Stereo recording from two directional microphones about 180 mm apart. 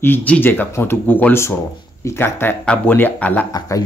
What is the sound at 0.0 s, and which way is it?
Speech, 10° left (ahead or behind).